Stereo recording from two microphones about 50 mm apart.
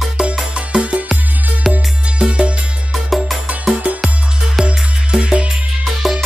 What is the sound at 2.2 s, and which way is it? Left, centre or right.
Music, right.